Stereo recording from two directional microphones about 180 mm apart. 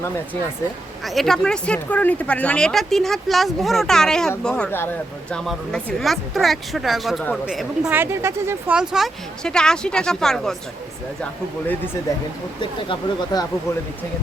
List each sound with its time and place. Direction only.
1.0 s speech: centre (ahead or behind)
12.9 s speech: 25° left (ahead or behind)